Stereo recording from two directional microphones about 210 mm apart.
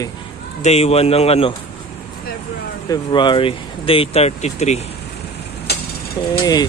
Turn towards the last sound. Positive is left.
turn(degrees=20)  # may be behind; listen again after turning